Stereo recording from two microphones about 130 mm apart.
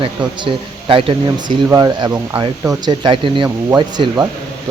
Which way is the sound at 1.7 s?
30° right (ahead or behind).